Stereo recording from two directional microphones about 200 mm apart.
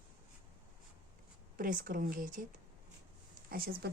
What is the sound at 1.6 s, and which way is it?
Speech, 45° right (ahead or behind).